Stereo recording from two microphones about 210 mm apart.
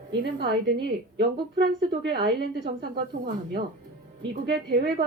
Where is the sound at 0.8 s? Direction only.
50° right (ahead or behind).